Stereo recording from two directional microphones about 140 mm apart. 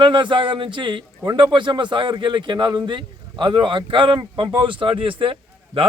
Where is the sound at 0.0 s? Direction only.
35° right (ahead or behind).